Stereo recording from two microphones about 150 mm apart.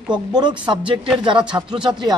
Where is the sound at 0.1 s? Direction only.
30° right (ahead or behind).